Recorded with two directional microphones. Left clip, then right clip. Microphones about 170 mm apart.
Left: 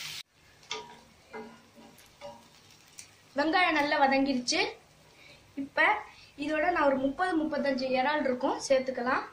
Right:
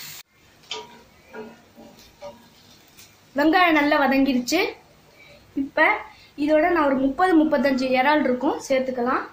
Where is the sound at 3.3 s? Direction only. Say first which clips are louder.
Right 8 dB; 40° right (ahead or behind).